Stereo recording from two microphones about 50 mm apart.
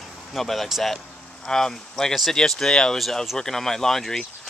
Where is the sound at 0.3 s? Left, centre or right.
Centre.